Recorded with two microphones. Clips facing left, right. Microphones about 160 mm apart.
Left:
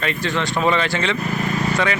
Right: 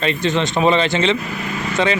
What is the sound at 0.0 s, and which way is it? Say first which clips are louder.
Speech: right 4 dB; 20° right (ahead or behind).